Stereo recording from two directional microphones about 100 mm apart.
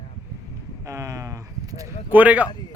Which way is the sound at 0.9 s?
30° right (ahead or behind).